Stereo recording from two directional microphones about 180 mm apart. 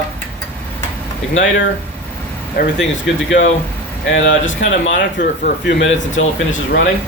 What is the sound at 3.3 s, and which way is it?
Speech, 50° left (ahead or behind).